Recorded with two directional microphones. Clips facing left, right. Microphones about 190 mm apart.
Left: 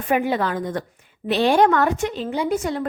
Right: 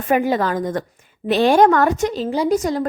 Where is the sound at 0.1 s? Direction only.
40° right (ahead or behind).